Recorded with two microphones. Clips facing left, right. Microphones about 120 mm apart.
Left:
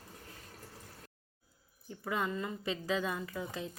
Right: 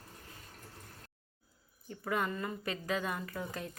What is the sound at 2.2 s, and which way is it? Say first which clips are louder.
Speech: even; 15° left (ahead or behind).